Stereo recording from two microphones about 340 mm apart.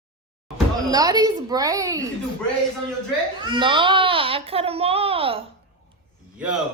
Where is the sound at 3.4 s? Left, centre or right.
Centre.